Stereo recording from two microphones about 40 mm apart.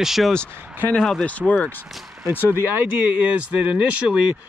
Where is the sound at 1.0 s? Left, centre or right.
Centre.